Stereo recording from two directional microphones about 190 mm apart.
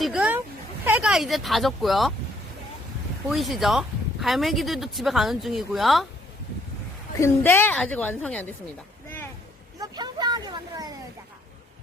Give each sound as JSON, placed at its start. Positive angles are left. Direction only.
{"t": 0.0, "sound": "a sound", "side_deg": -5}
{"t": 0.9, "sound": "speech", "side_deg": -5}
{"t": 3.2, "sound": "speech", "side_deg": 0}
{"t": 7.2, "sound": "a woman's voice", "side_deg": 15}
{"t": 9.8, "sound": "speech", "side_deg": -20}